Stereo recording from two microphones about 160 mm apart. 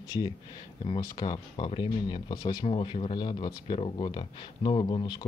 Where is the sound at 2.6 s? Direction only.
35° left (ahead or behind).